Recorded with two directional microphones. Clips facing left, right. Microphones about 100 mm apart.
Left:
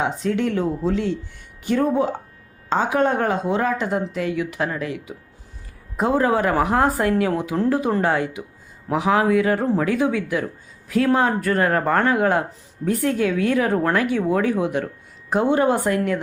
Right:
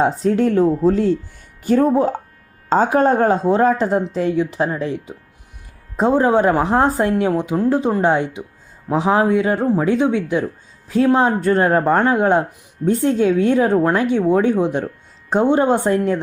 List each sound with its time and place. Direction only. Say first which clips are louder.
0.0 s a woman's voice: right 6 dB; 40° right (ahead or behind)